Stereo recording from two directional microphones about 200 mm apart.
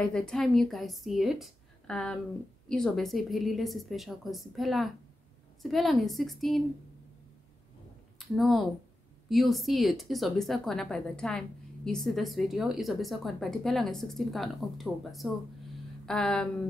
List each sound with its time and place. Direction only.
0.0 s a woman's voice: 5° left (ahead or behind)
8.2 s a woman's voice: centre (ahead or behind)